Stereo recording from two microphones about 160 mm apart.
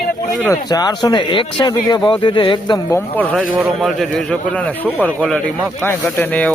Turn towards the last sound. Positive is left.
turn(degrees=10)  # may be behind; listen again after turning